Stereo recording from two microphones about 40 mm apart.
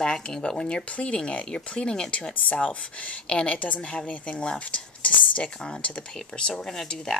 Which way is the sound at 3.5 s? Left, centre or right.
Left.